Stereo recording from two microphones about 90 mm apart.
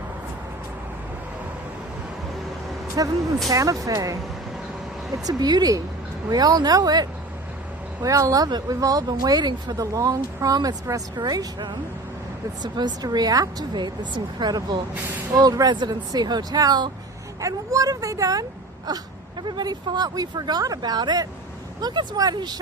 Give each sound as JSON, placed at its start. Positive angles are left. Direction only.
{"t": 3.0, "sound": "speech", "side_deg": -45}
{"t": 17.4, "sound": "speech", "side_deg": -40}